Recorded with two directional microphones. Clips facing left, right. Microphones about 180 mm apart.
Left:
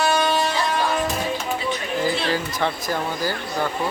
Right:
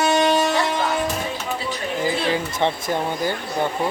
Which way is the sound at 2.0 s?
20° right (ahead or behind).